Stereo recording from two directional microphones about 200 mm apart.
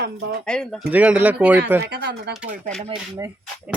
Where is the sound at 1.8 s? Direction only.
55° right (ahead or behind).